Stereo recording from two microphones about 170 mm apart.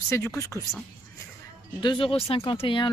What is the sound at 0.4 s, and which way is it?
Speech, 15° left (ahead or behind).